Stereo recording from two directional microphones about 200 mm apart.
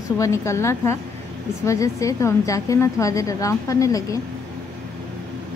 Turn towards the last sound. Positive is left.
turn(degrees=15)  # may be behind; listen again after turning